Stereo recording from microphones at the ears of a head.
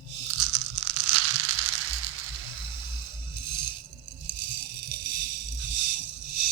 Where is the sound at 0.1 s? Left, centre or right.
Right.